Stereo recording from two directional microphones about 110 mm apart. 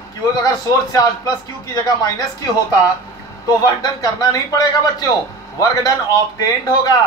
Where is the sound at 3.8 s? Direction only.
35° left (ahead or behind).